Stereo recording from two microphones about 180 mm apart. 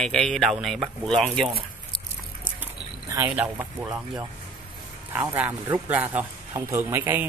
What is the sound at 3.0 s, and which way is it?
A man's voice, 10° right (ahead or behind).